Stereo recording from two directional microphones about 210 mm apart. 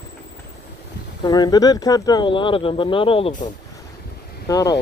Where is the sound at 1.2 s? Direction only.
20° left (ahead or behind).